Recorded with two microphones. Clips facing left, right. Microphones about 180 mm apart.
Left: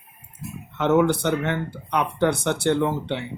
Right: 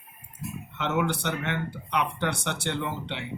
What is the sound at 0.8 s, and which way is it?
Speech, 45° left (ahead or behind).